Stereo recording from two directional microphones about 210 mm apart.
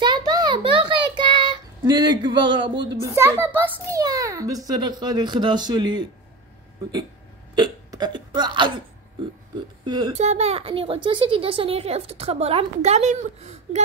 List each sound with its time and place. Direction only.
0.0 s child singing: 20° right (ahead or behind)
3.0 s a child's voice: 15° right (ahead or behind)
7.5 s burping: 20° right (ahead or behind)
9.8 s speech: 20° right (ahead or behind)